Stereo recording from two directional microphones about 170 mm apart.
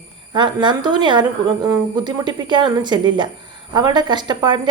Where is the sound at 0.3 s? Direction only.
25° right (ahead or behind).